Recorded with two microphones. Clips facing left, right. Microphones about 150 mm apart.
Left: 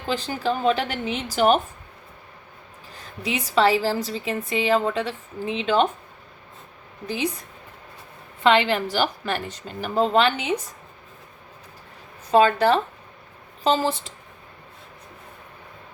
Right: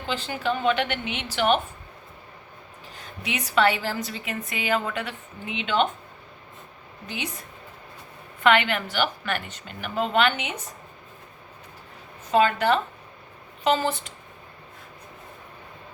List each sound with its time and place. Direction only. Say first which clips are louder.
0.1 s a woman's voice: left 3 dB; 40° left (ahead or behind)
3.2 s a woman's voice: left 2 dB; 30° left (ahead or behind)
8.4 s a woman's voice: left 2 dB; 30° left (ahead or behind)
12.3 s a woman's voice: left 3 dB; 35° left (ahead or behind)